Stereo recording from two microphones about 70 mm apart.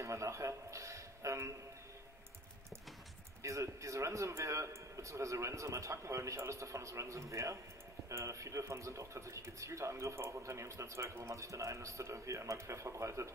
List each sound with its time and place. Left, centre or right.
0.0 s a man's voice: right
3.4 s speech: right